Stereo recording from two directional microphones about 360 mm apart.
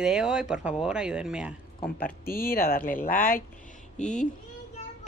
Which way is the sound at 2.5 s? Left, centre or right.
Left.